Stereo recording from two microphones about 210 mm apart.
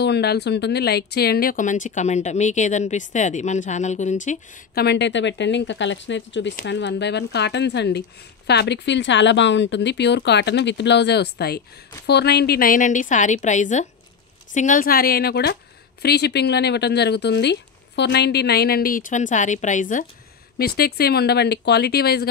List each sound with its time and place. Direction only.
0.0 s speech: 50° left (ahead or behind); by 4.8 s 35° left (ahead or behind)
4.8 s speech: 55° left (ahead or behind)